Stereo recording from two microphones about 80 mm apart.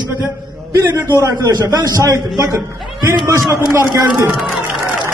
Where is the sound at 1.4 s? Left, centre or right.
Right.